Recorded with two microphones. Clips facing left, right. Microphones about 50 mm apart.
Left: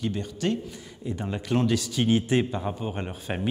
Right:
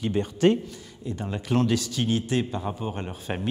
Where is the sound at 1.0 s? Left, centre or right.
Centre.